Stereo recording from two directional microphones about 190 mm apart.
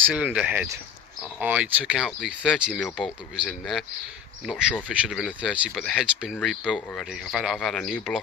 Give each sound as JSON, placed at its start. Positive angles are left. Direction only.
{"t": 0.0, "sound": "speech", "side_deg": -5}
{"t": 4.9, "sound": "speech", "side_deg": -5}